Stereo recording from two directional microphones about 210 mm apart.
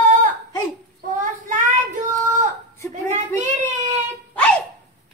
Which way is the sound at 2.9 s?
35° right (ahead or behind).